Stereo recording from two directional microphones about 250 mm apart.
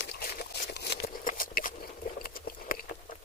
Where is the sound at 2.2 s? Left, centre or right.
Left.